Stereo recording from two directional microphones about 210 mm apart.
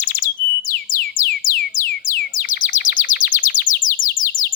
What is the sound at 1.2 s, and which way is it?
Music, 40° left (ahead or behind).